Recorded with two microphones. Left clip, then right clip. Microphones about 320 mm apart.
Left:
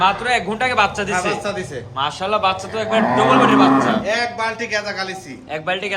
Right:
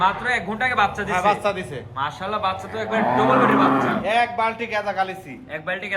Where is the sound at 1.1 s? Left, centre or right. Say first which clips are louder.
Right 1 dB; centre.